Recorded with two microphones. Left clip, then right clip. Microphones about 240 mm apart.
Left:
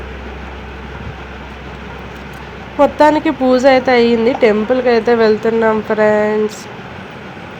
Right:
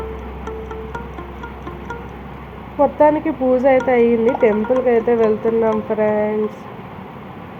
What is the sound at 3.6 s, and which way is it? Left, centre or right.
Speech, left.